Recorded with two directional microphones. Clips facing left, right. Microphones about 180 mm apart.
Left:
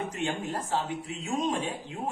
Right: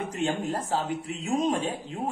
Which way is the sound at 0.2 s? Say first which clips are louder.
Right 6 dB; 35° right (ahead or behind).